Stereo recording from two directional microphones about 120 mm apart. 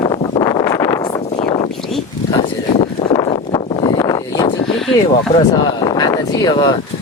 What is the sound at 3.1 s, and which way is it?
Vehicle, 40° left (ahead or behind).